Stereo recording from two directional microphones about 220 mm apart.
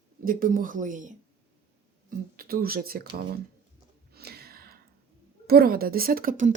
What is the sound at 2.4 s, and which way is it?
Speech, 40° right (ahead or behind).